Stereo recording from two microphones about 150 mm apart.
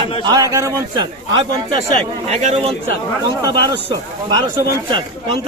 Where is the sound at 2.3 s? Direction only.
50° right (ahead or behind).